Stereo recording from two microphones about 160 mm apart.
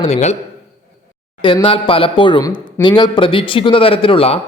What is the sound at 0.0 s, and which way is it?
Speech, 45° left (ahead or behind).